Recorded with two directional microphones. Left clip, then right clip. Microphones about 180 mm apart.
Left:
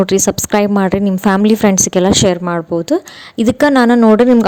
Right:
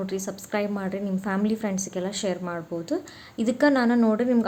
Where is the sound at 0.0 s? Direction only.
60° left (ahead or behind).